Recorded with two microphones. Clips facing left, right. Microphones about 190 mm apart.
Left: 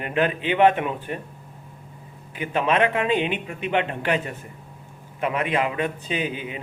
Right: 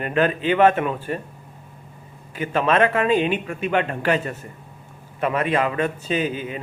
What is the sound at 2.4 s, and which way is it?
A man's voice, 15° left (ahead or behind).